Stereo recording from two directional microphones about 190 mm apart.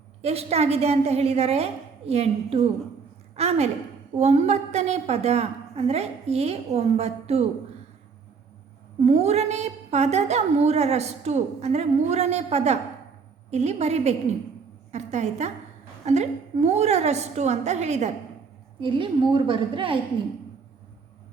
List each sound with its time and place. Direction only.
0.2 s a woman's voice: 35° right (ahead or behind)
9.0 s a woman's voice: 35° right (ahead or behind)